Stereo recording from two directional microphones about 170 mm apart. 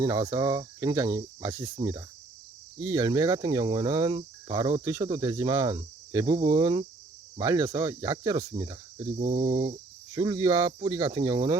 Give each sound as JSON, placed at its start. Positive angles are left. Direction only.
{"t": 0.0, "sound": "cricket", "side_deg": -20}
{"t": 9.1, "sound": "cricket", "side_deg": -45}
{"t": 10.2, "sound": "cricket", "side_deg": -25}